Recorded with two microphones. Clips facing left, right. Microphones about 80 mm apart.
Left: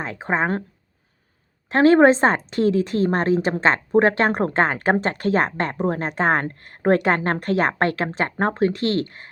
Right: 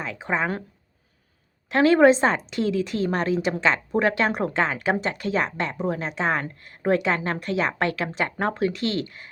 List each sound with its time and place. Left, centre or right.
0.0 s a woman's voice: left
1.7 s a woman's voice: left